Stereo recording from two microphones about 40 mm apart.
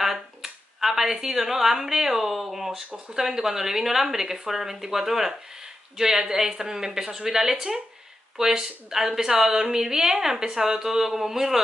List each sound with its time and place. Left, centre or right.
0.0 s a woman's voice: centre